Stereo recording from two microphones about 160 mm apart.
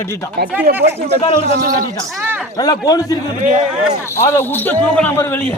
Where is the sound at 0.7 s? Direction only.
75° right (ahead or behind).